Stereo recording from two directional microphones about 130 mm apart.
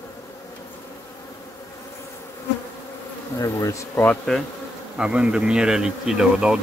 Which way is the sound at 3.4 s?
25° left (ahead or behind).